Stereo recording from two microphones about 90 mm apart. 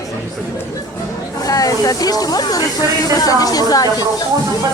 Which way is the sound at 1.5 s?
40° left (ahead or behind).